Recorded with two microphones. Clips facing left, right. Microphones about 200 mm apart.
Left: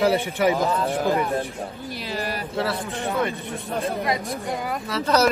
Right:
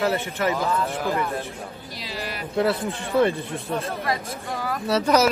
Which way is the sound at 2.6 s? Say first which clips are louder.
Right 4 dB; 30° right (ahead or behind).